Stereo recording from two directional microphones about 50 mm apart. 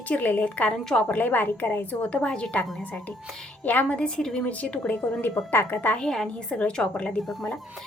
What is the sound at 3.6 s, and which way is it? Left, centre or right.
Speech, left.